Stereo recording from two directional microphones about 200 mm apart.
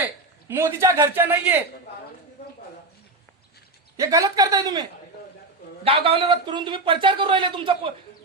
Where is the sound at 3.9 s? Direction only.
15° right (ahead or behind).